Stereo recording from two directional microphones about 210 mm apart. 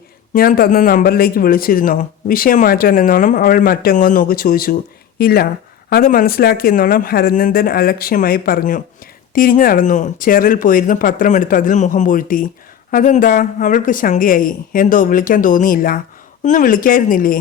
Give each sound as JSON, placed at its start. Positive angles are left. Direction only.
{"t": 0.3, "sound": "speech", "side_deg": 45}